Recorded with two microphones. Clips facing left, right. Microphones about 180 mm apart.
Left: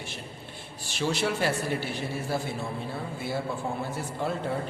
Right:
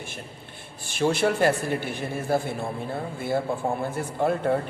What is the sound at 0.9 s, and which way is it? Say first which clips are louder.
A woman's voice: right 5 dB; 55° right (ahead or behind).